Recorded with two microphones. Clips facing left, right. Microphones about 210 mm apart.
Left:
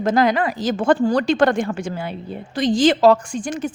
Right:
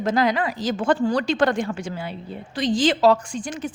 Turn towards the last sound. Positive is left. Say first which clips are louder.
# left 4 dB
turn(degrees=45)  # may be behind; listen again after turning